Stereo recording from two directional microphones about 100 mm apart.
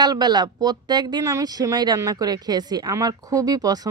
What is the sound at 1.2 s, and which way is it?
Speech, 35° right (ahead or behind).